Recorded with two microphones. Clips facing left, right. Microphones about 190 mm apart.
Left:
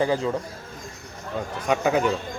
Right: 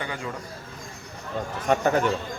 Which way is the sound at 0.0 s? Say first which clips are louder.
Left 11 dB; 30° left (ahead or behind).